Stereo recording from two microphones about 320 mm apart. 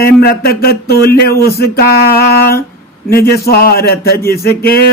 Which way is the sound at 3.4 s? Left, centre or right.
Left.